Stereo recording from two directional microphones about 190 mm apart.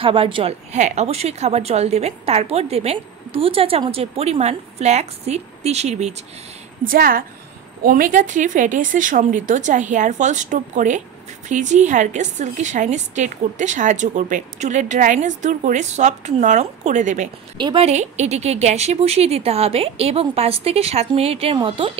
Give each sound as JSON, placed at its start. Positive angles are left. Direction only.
{"t": 0.0, "sound": "speech", "side_deg": -25}
{"t": 6.8, "sound": "a woman's voice", "side_deg": -50}
{"t": 17.6, "sound": "speech", "side_deg": -25}